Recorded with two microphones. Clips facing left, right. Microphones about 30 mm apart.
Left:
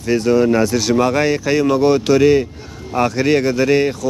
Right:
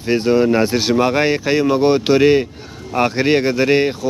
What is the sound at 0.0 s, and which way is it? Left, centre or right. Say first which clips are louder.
Speech: even; right.